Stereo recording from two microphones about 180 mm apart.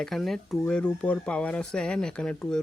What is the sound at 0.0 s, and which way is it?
Speech, centre (ahead or behind).